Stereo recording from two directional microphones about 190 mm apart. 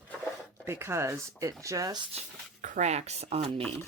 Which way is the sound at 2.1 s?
40° right (ahead or behind).